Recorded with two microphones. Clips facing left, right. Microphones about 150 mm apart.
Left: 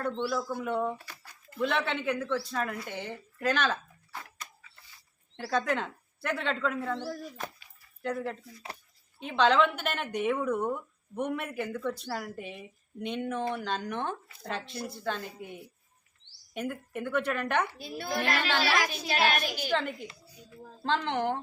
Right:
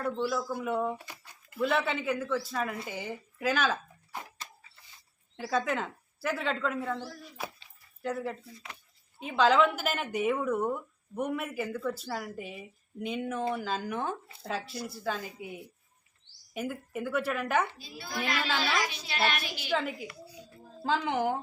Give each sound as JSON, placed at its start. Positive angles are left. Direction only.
{"t": 0.0, "sound": "a woman's voice", "side_deg": -5}
{"t": 0.9, "sound": "a sound", "side_deg": -20}
{"t": 1.5, "sound": "a woman's voice", "side_deg": -5}
{"t": 5.4, "sound": "a woman's voice", "side_deg": -5}
{"t": 7.1, "sound": "a woman's voice", "side_deg": 45}
{"t": 8.0, "sound": "a woman's voice", "side_deg": -5}
{"t": 17.7, "sound": "a child's voice", "side_deg": 55}
{"t": 18.9, "sound": "a woman's voice", "side_deg": 45}
{"t": 19.7, "sound": "a woman's voice", "side_deg": -5}